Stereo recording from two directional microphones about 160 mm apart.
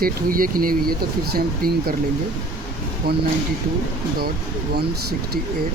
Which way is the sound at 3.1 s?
70° right (ahead or behind).